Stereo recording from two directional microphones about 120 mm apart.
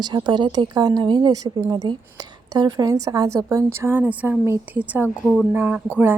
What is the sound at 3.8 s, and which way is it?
A woman's voice, 15° right (ahead or behind).